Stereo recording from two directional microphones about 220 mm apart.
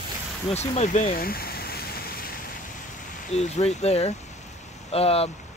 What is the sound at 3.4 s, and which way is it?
Speech, 30° left (ahead or behind).